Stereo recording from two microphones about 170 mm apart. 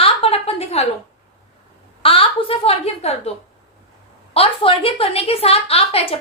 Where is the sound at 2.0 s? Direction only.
30° left (ahead or behind).